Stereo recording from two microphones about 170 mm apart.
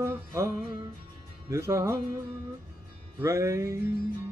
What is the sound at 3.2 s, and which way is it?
Music, 15° right (ahead or behind).